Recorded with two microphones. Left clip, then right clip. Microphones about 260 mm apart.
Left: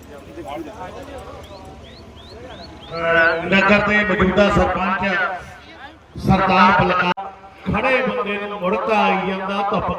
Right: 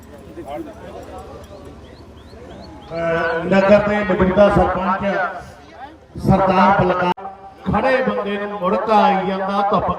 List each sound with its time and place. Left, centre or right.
2.9 s a man's voice: centre
6.1 s a man's voice: right